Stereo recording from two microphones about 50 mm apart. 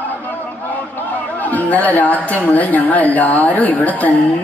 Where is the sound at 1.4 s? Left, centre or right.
Left.